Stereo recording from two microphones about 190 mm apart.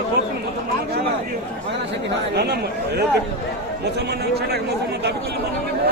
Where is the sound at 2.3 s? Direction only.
60° right (ahead or behind).